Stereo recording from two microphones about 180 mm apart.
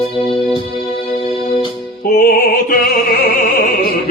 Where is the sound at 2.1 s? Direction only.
55° left (ahead or behind).